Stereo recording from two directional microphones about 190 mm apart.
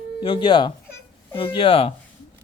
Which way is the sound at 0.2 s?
25° left (ahead or behind).